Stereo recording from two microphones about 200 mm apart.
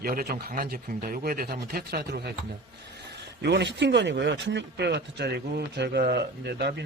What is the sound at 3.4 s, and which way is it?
Speech, 60° right (ahead or behind).